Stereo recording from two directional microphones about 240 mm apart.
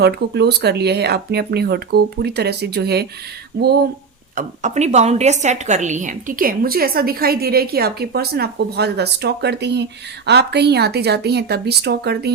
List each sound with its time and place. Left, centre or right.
0.0 s speech: right
4.4 s a woman's voice: right